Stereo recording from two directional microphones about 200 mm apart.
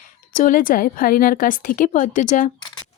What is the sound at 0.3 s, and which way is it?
A woman's voice, 45° left (ahead or behind).